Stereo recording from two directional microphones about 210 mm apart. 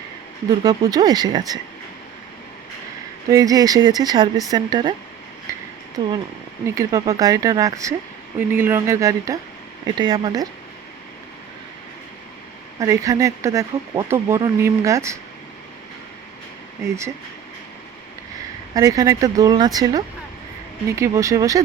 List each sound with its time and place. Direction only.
0.6 s speech: 20° right (ahead or behind)
3.2 s speech: 15° right (ahead or behind)
5.5 s a sound: 15° right (ahead or behind)
6.0 s speech: 20° right (ahead or behind)
12.8 s speech: 15° right (ahead or behind)
16.8 s speech: 15° right (ahead or behind)
18.7 s speech: 15° right (ahead or behind)